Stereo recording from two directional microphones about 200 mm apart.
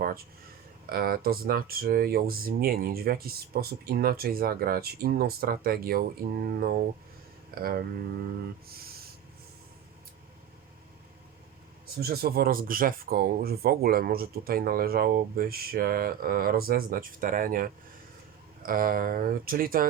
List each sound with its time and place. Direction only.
0.9 s speech: 45° right (ahead or behind)
11.9 s speech: 50° right (ahead or behind)